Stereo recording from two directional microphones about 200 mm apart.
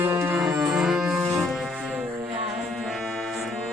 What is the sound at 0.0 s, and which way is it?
Music, 10° right (ahead or behind).